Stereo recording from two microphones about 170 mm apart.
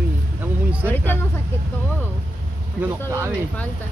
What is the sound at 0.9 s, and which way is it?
Speech, 10° left (ahead or behind).